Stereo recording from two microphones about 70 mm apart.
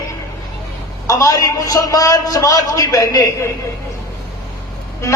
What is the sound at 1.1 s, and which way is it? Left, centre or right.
A man's voice, left.